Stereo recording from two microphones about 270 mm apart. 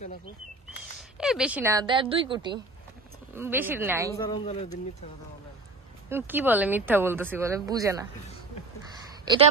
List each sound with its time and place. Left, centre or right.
1.1 s speech: centre
4.2 s speech: centre
6.0 s speech: centre